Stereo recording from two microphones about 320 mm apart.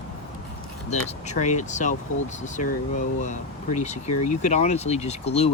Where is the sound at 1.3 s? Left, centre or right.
Left.